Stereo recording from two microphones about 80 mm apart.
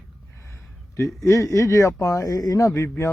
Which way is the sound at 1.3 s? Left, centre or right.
Left.